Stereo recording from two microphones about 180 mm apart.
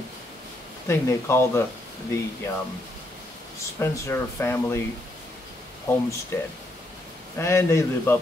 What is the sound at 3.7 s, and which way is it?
Speech, 15° left (ahead or behind).